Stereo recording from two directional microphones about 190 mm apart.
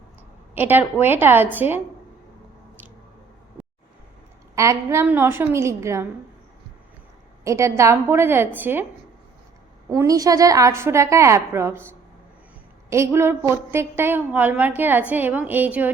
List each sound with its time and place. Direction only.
0.5 s a woman's voice: 10° right (ahead or behind)
4.5 s a woman's voice: 15° right (ahead or behind)
7.4 s a woman's voice: 15° right (ahead or behind)
9.9 s a woman's voice: 20° right (ahead or behind)
12.9 s a woman's voice: 15° right (ahead or behind)